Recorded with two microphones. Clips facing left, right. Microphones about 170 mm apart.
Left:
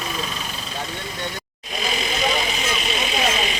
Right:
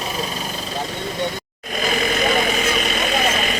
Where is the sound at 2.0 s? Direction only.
55° right (ahead or behind).